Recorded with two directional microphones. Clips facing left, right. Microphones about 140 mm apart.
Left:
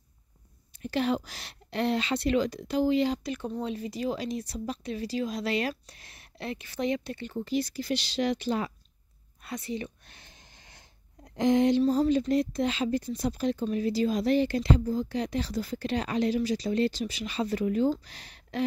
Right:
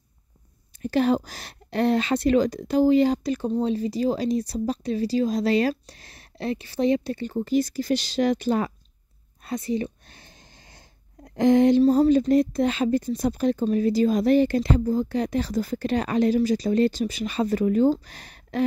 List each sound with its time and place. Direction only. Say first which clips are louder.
0.7 s speech: right 6 dB; 45° right (ahead or behind)
9.4 s a sound: right 8 dB; 40° right (ahead or behind)
11.2 s speech: right 6 dB; 55° right (ahead or behind)